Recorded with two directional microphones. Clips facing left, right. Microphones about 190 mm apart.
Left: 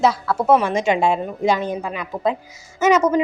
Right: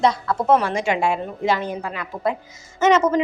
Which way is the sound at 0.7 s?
20° left (ahead or behind).